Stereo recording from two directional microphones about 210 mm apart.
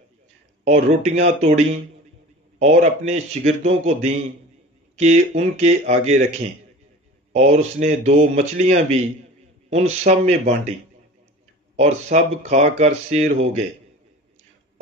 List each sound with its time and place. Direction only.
0.7 s speech: 35° right (ahead or behind)
2.6 s speech: 30° right (ahead or behind)
7.3 s speech: 35° right (ahead or behind)
10.0 s speech: 35° right (ahead or behind)
11.7 s speech: 35° right (ahead or behind)